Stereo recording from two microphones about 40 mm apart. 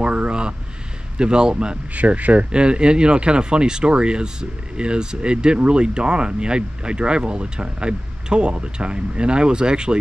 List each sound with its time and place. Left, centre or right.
0.0 s a sound: right
1.1 s speech: right
2.0 s speech: right
2.5 s speech: right